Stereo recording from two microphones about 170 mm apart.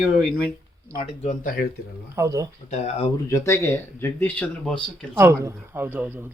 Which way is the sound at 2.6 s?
40° left (ahead or behind).